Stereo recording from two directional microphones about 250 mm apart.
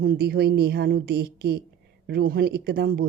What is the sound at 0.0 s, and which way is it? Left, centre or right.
Speech, right.